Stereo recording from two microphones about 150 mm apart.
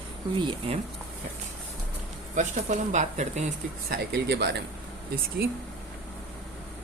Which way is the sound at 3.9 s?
90° right.